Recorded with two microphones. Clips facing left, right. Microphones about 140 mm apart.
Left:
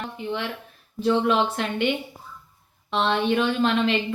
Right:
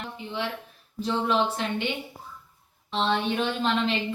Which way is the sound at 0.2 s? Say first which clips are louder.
Left 2 dB; 55° left (ahead or behind).